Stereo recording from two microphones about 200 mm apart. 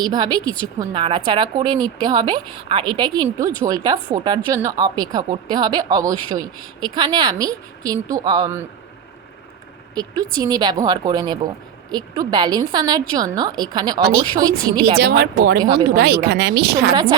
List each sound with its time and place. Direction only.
0.0 s speech: 20° right (ahead or behind)
9.9 s speech: 20° right (ahead or behind)
14.9 s speech: 50° right (ahead or behind)
15.5 s speech: 20° right (ahead or behind)
16.0 s a woman's voice: 55° right (ahead or behind)